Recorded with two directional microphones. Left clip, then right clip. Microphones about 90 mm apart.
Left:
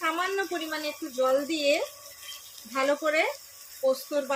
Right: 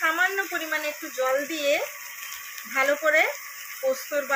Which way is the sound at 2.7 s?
50° left (ahead or behind).